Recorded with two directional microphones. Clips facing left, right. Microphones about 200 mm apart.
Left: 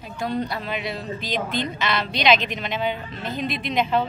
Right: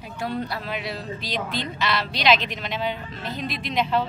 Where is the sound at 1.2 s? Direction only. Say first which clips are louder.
Left 4 dB; 50° left (ahead or behind).